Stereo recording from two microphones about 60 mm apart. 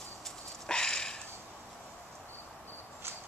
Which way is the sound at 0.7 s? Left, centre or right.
Centre.